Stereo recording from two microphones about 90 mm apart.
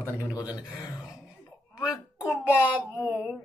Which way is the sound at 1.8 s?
10° right (ahead or behind).